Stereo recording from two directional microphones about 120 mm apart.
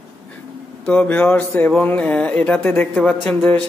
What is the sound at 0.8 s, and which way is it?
Speech, 10° left (ahead or behind).